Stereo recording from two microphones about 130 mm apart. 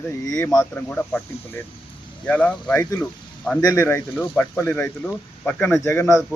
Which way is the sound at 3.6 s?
20° left (ahead or behind).